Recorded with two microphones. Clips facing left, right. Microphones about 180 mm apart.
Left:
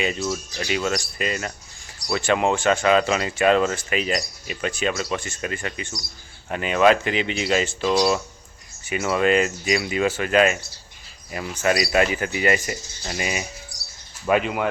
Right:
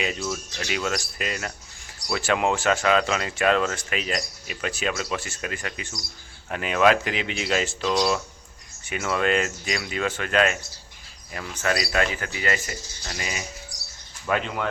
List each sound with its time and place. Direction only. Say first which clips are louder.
0.0 s speech: left 3 dB; centre (ahead or behind)